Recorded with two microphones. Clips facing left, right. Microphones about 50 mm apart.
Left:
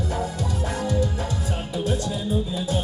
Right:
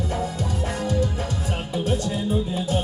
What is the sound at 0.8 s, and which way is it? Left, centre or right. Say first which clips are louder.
Music: even; right.